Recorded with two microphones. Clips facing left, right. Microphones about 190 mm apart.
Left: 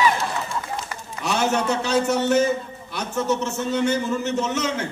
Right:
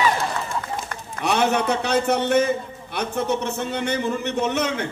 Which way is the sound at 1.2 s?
60° right (ahead or behind).